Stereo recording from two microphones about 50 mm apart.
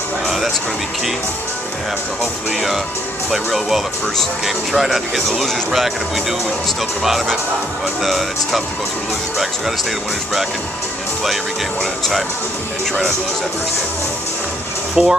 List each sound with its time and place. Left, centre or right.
3.3 s speech: centre
15.0 s speech: centre